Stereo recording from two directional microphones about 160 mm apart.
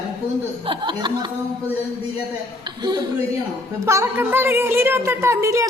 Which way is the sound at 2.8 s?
25° right (ahead or behind).